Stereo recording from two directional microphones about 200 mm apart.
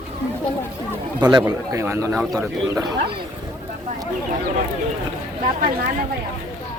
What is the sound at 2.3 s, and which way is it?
Speech, 20° right (ahead or behind).